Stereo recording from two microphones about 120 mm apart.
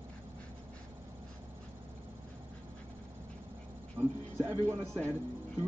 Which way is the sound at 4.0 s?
15° right (ahead or behind).